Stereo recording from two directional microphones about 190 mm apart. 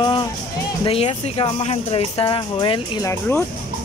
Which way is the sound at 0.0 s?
25° left (ahead or behind).